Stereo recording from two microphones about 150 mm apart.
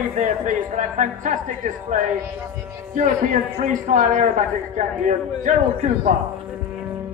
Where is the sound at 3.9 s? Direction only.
55° right (ahead or behind).